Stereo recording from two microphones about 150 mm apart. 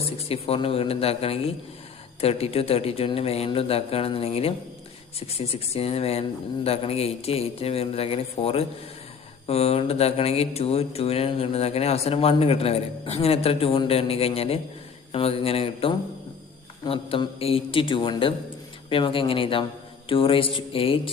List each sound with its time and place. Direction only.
0.3 s speech: 40° left (ahead or behind)